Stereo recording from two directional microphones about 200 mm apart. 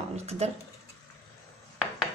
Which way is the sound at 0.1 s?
30° right (ahead or behind).